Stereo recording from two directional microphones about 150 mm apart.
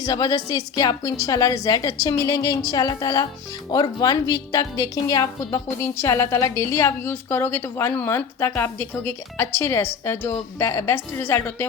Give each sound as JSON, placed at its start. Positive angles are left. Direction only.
{"t": 0.0, "sound": "a woman's voice", "side_deg": 25}